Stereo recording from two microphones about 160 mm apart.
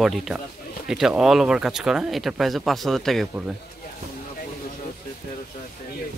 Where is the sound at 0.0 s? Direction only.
Centre (ahead or behind).